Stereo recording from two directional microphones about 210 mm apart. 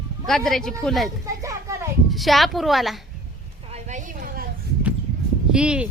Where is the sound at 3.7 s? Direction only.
35° right (ahead or behind).